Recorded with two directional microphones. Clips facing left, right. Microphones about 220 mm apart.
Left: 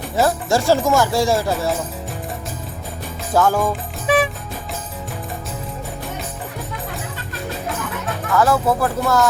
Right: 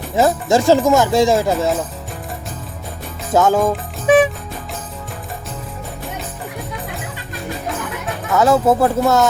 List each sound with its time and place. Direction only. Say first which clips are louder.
0.2 s speech: right 3 dB; 20° right (ahead or behind)
3.3 s speech: right 3 dB; 20° right (ahead or behind)
8.3 s speech: right 4 dB; 20° right (ahead or behind)